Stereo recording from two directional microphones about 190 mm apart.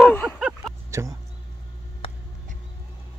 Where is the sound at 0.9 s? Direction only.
15° right (ahead or behind).